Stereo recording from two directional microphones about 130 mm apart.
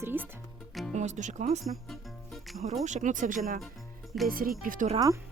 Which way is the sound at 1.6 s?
Centre (ahead or behind).